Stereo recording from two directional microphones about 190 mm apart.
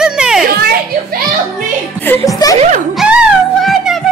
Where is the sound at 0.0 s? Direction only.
5° right (ahead or behind).